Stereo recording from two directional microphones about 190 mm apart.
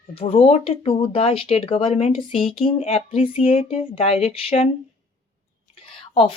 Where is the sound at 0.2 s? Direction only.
30° left (ahead or behind).